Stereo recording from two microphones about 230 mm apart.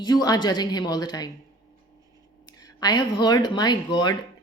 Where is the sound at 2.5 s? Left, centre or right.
Centre.